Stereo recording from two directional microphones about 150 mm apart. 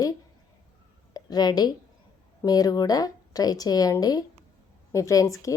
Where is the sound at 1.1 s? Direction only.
25° left (ahead or behind).